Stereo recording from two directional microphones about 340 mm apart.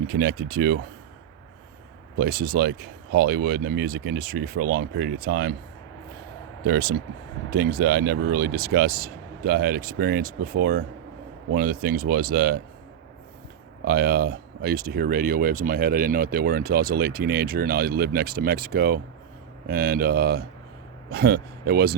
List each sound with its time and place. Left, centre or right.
0.1 s speech: right
2.1 s speech: right
6.7 s speech: right
13.8 s speech: right